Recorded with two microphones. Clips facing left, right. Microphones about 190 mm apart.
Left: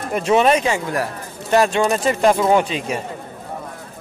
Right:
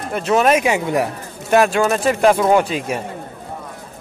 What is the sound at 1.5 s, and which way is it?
Speech, 5° right (ahead or behind).